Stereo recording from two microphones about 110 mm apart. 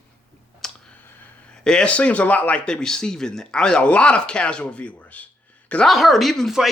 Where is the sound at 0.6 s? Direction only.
5° left (ahead or behind).